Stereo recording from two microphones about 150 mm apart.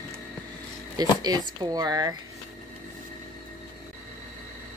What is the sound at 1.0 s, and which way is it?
Speech, 25° right (ahead or behind).